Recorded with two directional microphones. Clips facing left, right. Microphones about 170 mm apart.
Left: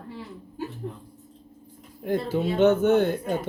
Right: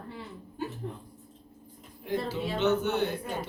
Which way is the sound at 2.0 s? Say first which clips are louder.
Left 6 dB; 50° left (ahead or behind).